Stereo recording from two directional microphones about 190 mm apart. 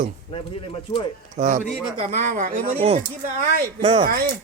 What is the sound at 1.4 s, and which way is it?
A woman's voice, 40° right (ahead or behind).